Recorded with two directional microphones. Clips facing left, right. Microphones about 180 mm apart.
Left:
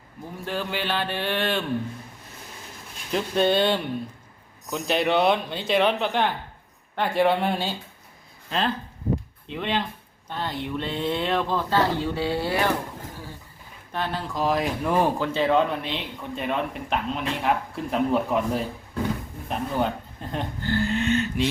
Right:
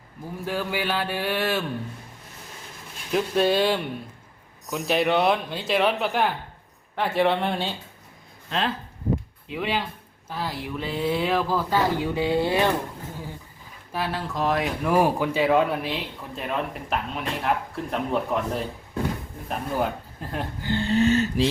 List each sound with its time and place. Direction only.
0.4 s speech: 10° right (ahead or behind)
3.1 s speech: 5° right (ahead or behind); by 12.7 s 20° right (ahead or behind)
13.9 s speech: 5° right (ahead or behind)
20.7 s speech: 25° right (ahead or behind)